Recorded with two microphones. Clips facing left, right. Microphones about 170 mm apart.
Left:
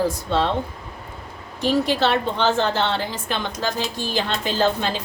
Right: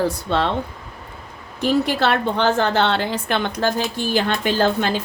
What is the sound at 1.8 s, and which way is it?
A woman's voice, 60° right (ahead or behind).